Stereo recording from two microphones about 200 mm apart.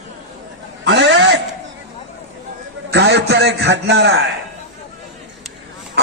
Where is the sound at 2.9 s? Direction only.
60° right (ahead or behind).